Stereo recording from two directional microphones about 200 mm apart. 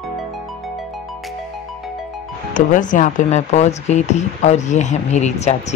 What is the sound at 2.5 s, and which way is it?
Speech, 40° left (ahead or behind).